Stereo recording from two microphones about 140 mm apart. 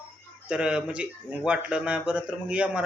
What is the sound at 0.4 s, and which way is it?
Speech, 10° right (ahead or behind).